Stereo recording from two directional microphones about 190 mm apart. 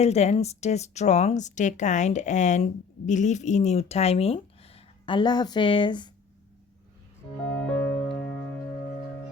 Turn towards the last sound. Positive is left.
turn(degrees=5)  # may be behind; listen again after turning